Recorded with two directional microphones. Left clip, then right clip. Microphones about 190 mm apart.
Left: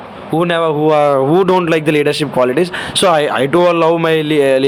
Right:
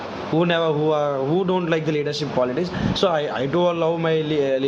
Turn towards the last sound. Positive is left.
turn(degrees=40)  # may be behind; listen again after turning